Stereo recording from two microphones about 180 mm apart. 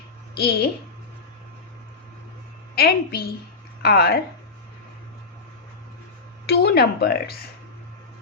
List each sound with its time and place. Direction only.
0.3 s a woman's voice: 60° left (ahead or behind)
2.7 s a woman's voice: 60° left (ahead or behind)
6.4 s speech: 65° left (ahead or behind)